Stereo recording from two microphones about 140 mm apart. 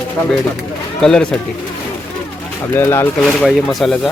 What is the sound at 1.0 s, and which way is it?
Speech, 5° left (ahead or behind).